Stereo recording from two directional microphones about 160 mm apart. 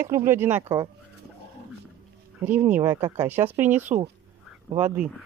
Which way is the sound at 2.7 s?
15° right (ahead or behind).